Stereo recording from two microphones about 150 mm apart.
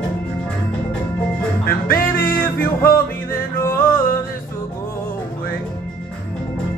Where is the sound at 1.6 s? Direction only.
85° left.